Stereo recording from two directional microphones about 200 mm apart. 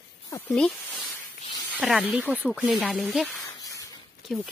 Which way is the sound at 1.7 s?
5° right (ahead or behind).